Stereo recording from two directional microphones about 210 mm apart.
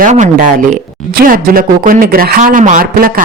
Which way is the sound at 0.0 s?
35° right (ahead or behind).